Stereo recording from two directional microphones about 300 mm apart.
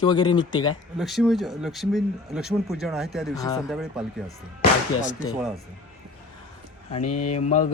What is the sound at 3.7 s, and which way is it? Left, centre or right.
Speech, centre.